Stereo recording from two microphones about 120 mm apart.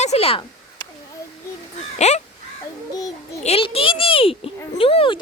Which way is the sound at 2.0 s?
70° left (ahead or behind).